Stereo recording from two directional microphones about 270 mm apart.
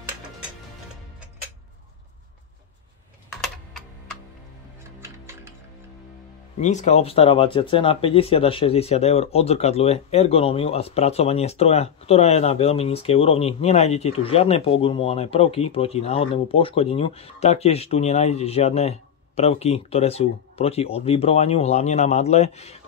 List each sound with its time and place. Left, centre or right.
5.0 s music: centre
6.6 s speech: left